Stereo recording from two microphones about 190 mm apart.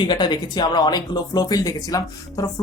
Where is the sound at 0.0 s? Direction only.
20° left (ahead or behind).